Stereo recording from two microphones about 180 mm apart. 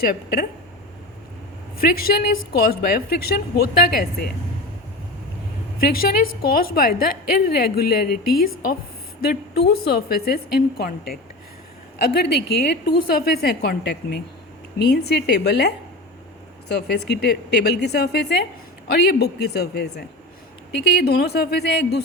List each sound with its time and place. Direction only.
0.0 s speech: 50° left (ahead or behind)
1.8 s a woman's voice: 55° left (ahead or behind)
5.8 s a woman's voice: 55° left (ahead or behind)